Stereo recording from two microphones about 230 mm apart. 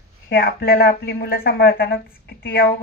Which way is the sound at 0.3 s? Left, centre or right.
Left.